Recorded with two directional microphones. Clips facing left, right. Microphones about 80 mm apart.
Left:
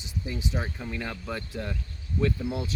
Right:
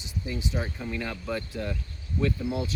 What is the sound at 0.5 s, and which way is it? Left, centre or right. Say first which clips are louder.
Speech: right 1 dB; centre.